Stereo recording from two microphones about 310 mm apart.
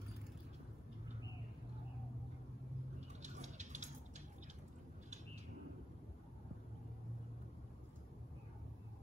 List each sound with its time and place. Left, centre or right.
3.2 s vehicle: right